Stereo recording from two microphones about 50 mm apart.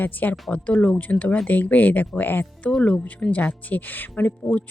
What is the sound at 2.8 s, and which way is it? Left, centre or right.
Speech, left.